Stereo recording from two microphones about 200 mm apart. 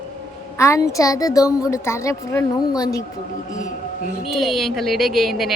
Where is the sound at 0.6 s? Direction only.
15° left (ahead or behind).